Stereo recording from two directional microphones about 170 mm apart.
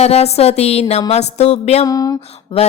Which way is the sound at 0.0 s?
35° left (ahead or behind).